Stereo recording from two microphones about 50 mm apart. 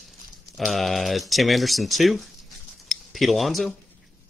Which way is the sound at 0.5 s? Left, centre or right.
Centre.